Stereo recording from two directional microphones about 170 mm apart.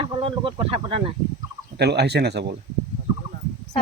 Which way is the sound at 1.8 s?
75° right (ahead or behind).